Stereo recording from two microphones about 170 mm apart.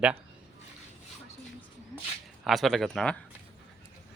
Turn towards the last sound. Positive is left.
turn(degrees=5)  # may be behind; listen again after turning